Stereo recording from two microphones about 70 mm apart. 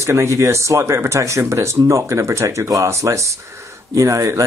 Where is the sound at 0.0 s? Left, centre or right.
Right.